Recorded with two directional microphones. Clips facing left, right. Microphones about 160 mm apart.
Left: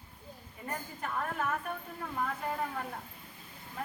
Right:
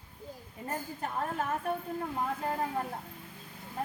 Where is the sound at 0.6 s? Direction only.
30° right (ahead or behind).